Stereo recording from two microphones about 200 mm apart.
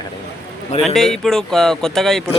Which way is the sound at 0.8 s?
Centre (ahead or behind).